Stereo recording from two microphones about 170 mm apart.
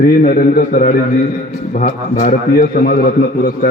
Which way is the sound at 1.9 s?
40° left (ahead or behind).